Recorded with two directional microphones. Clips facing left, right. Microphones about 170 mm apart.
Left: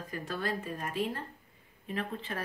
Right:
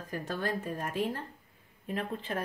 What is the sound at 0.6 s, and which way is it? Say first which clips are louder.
Speech: right 1 dB; 45° right (ahead or behind).